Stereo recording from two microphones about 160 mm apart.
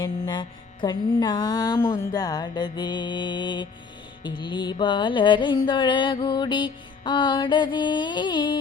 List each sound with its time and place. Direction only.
0.0 s music: 30° left (ahead or behind)